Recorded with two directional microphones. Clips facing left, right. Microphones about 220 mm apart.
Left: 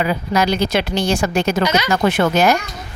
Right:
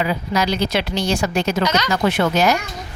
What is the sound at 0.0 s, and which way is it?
Speech, 50° left (ahead or behind).